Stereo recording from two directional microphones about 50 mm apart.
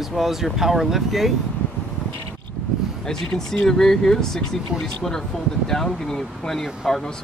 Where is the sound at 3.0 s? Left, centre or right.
Centre.